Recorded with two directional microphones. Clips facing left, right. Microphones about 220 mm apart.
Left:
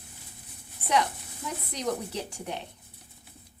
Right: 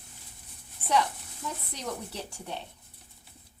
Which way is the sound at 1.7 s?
15° left (ahead or behind).